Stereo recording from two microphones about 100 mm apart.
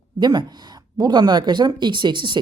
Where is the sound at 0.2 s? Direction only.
45° right (ahead or behind).